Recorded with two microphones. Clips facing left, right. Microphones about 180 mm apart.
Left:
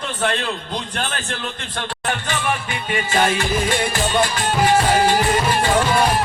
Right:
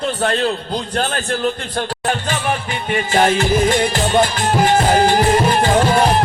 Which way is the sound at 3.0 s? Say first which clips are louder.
Right 4 dB; 40° right (ahead or behind).